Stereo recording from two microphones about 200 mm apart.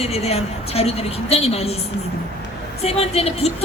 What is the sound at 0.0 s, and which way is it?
A woman's voice, 30° left (ahead or behind).